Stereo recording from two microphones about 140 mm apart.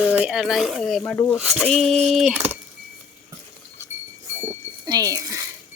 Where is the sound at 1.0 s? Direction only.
20° left (ahead or behind).